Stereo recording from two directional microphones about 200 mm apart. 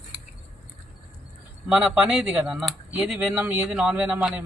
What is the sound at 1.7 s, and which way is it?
A man's voice, 5° right (ahead or behind).